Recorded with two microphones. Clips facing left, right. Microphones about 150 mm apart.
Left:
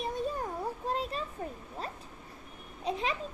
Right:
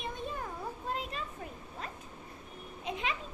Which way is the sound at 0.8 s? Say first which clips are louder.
Left 4 dB; 35° left (ahead or behind).